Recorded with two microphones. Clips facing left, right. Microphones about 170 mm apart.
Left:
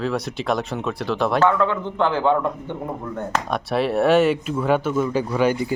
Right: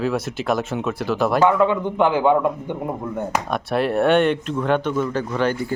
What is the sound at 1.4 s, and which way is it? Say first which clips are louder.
A man's voice: right 3 dB; 15° right (ahead or behind).